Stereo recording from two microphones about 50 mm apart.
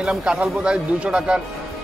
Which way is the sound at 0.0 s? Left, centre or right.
Centre.